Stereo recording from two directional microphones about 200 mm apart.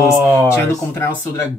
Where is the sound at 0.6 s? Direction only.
10° left (ahead or behind).